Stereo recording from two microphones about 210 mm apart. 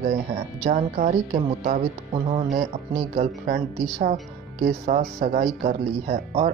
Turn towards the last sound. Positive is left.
turn(degrees=-35)  # may be behind; listen again after turning